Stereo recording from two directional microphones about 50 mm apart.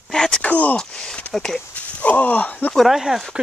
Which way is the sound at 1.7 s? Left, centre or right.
Left.